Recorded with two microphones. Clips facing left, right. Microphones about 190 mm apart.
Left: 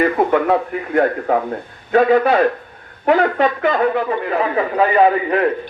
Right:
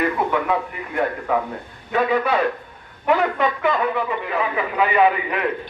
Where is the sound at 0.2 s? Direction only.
55° left (ahead or behind).